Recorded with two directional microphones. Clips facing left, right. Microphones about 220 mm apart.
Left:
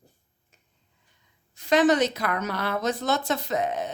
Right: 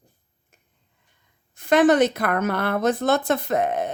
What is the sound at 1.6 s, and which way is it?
A woman's voice, 55° right (ahead or behind).